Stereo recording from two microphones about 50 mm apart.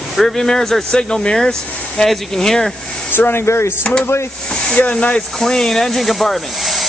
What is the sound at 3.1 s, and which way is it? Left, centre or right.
Speech, left.